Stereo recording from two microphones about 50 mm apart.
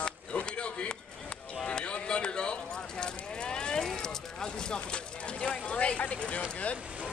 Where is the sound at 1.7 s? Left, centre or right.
Left.